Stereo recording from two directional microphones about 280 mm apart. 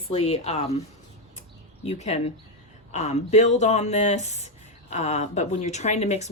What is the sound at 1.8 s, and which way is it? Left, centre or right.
Speech, left.